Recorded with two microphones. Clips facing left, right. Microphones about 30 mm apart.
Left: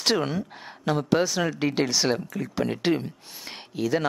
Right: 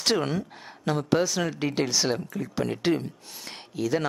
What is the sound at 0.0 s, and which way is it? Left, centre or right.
Speech, centre.